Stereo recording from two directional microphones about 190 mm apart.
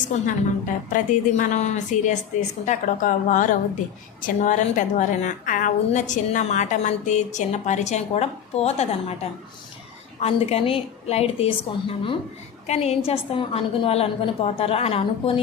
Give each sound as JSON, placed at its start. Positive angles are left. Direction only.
{"t": 0.0, "sound": "a woman's voice", "side_deg": 40}
{"t": 10.2, "sound": "a woman's voice", "side_deg": 30}